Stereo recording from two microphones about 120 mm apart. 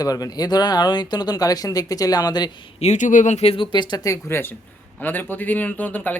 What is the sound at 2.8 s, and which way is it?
Speech, 80° left.